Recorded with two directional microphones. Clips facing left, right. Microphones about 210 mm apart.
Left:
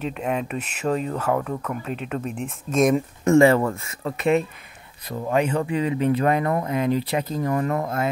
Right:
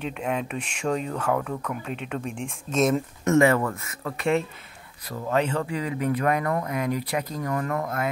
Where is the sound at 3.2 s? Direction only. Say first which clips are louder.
Left 4 dB; 30° left (ahead or behind).